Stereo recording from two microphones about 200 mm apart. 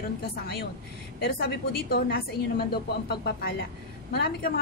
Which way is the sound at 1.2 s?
50° left (ahead or behind).